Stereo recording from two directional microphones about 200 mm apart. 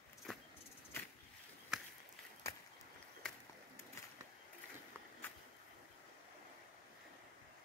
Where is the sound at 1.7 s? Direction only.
Centre (ahead or behind).